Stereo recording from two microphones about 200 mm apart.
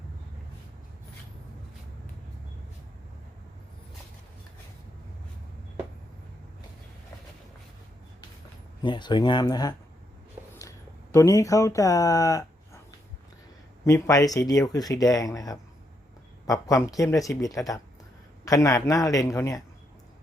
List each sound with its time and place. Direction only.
8.8 s speech: 25° left (ahead or behind)
13.8 s speech: 15° left (ahead or behind)